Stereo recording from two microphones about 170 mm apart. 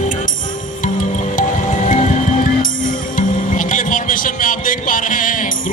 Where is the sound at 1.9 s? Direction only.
45° left (ahead or behind).